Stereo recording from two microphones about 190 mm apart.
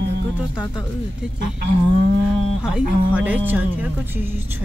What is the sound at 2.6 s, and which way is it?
Speech, 5° right (ahead or behind).